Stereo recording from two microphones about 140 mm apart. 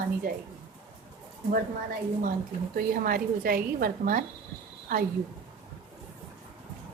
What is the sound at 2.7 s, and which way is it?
A woman's voice, 90° right.